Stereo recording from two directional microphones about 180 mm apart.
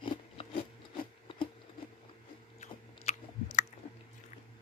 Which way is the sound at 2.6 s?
40° left (ahead or behind).